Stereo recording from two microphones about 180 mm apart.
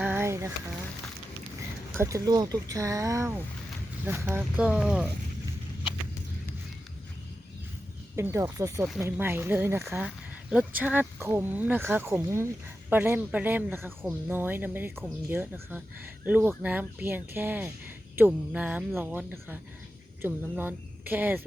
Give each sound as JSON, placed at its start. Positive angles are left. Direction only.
{"t": 0.0, "sound": "a sound", "side_deg": -15}
{"t": 2.0, "sound": "speech", "side_deg": -15}
{"t": 8.1, "sound": "speech", "side_deg": -15}
{"t": 9.8, "sound": "speech", "side_deg": 0}